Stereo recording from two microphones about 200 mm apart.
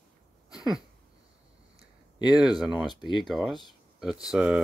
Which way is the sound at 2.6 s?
5° right (ahead or behind).